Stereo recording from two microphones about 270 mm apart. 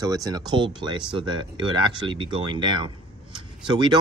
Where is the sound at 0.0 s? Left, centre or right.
Centre.